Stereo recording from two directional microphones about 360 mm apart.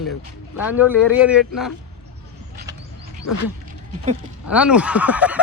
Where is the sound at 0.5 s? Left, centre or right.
Centre.